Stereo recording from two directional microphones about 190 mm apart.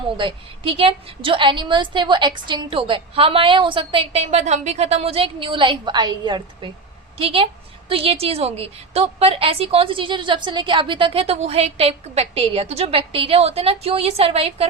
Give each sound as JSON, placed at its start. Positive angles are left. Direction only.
{"t": 0.2, "sound": "a woman's voice", "side_deg": -25}